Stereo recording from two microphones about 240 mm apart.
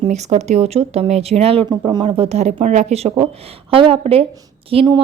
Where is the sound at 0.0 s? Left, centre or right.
Right.